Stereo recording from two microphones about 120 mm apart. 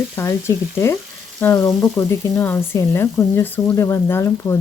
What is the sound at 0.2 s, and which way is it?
Speech, 25° left (ahead or behind).